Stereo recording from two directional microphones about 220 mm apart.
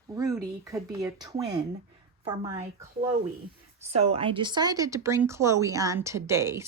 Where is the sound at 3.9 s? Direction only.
25° right (ahead or behind).